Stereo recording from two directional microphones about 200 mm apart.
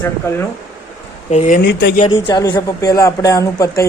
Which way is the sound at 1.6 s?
55° left (ahead or behind).